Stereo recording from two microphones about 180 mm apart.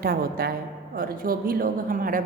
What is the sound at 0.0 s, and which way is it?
A woman's voice, 55° right (ahead or behind).